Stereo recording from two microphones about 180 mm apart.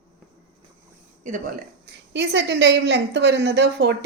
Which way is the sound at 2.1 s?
75° right (ahead or behind).